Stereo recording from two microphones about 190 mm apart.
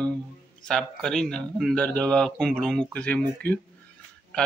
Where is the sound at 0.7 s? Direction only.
5° left (ahead or behind).